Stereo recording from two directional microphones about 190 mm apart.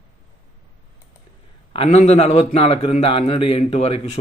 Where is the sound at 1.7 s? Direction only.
30° left (ahead or behind).